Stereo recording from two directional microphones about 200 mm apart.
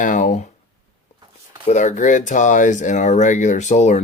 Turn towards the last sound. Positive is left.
turn(degrees=35)  # may be behind; listen again after turning